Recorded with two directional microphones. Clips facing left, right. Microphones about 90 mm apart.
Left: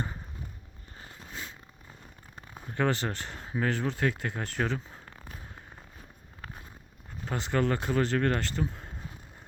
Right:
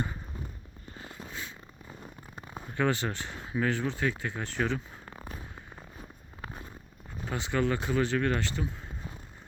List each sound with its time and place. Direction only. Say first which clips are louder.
1.3 s a sound: left 1 dB; 35° left (ahead or behind)
2.7 s speech: even; 40° left (ahead or behind)
7.3 s speech: left 1 dB; 45° left (ahead or behind)